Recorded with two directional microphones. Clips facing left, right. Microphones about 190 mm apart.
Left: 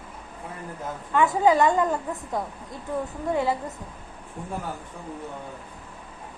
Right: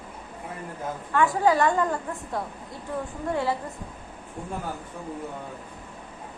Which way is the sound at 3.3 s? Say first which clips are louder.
Left 2 dB; 20° left (ahead or behind).